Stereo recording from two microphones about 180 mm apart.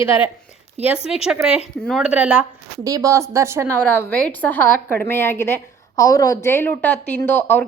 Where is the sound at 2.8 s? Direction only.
20° right (ahead or behind).